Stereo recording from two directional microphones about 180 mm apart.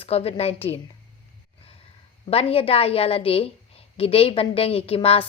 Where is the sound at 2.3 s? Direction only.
30° left (ahead or behind).